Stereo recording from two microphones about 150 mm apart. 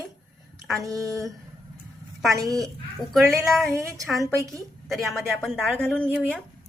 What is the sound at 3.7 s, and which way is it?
Speech, 20° right (ahead or behind).